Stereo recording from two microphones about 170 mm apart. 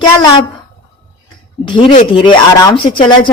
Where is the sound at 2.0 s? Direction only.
30° left (ahead or behind).